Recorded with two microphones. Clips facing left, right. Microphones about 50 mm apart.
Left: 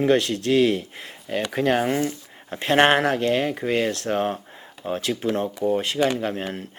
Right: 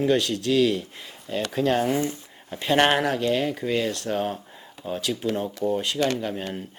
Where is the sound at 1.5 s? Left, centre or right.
Centre.